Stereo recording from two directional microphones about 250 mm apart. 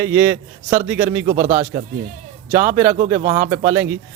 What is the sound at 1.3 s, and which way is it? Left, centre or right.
Speech, right.